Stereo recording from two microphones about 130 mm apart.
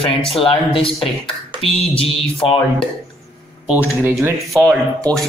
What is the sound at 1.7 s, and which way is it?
Music, 50° left (ahead or behind).